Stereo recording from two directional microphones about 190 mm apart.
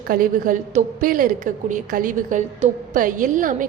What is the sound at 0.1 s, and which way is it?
A woman's voice, 45° right (ahead or behind).